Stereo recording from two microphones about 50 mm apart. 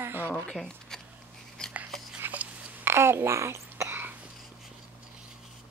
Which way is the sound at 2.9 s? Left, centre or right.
Right.